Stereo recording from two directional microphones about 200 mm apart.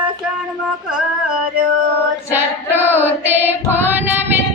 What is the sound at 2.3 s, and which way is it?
Child singing, 10° right (ahead or behind).